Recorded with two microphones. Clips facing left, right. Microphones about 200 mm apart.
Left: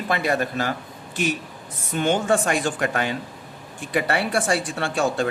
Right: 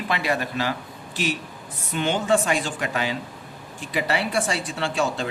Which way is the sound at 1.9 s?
45° left (ahead or behind).